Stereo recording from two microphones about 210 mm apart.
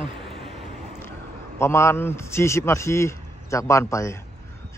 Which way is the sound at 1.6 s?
10° left (ahead or behind).